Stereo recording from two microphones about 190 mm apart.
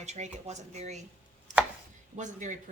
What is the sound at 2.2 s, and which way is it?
Speech, 40° right (ahead or behind).